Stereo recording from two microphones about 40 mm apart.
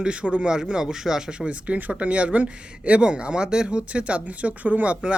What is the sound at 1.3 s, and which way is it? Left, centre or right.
Speech, right.